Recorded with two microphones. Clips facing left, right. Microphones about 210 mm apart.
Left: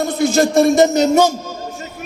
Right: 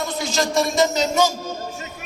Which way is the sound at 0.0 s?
55° left (ahead or behind).